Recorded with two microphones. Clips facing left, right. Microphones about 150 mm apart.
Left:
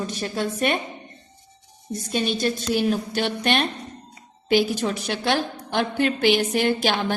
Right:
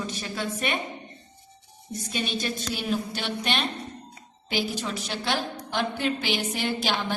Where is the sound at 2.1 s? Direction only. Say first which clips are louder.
Left 7 dB; 40° left (ahead or behind).